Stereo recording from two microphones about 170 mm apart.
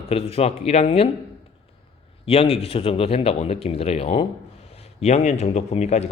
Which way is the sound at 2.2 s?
35° left (ahead or behind).